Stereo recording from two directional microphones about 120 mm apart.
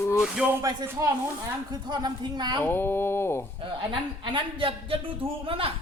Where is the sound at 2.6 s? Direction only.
20° left (ahead or behind).